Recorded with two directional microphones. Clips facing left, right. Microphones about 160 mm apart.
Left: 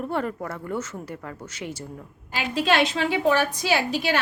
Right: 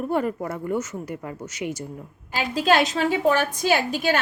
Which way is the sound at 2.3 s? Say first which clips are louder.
Right 2 dB; 40° right (ahead or behind).